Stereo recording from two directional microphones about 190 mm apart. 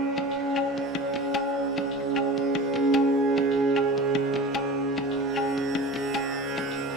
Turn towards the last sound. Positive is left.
turn(degrees=0)  # may be behind; listen again after turning